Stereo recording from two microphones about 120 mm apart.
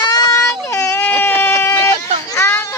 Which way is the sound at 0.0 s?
35° left (ahead or behind).